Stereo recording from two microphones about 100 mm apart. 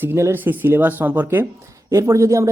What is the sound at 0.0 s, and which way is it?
Speech, 25° right (ahead or behind).